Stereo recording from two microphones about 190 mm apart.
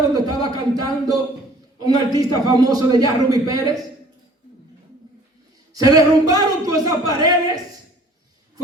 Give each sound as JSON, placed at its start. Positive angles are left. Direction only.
{"t": 0.1, "sound": "speech", "side_deg": -20}
{"t": 5.7, "sound": "speech", "side_deg": -20}